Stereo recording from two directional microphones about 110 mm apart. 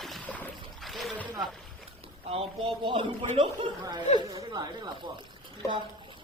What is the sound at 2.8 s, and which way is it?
Speech, 50° right (ahead or behind).